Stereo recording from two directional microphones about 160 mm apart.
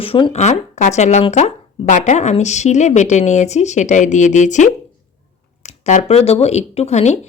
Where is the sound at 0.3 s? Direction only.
45° left (ahead or behind).